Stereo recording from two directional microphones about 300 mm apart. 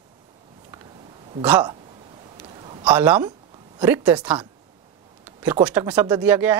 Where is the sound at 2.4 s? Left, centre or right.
Centre.